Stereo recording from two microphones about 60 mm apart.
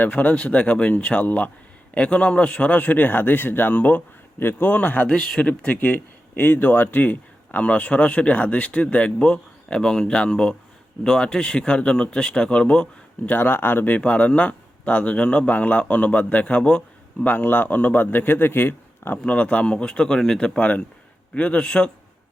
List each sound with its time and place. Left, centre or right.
0.0 s speech: left
5.1 s speech: centre
13.2 s speech: left
16.6 s a sound: centre
17.2 s speech: left
19.2 s speech: left
20.6 s speech: left